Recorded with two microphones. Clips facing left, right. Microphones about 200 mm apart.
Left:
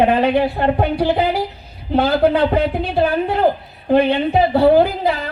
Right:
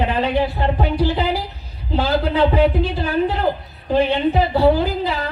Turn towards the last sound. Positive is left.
turn(degrees=60)  # may be behind; listen again after turning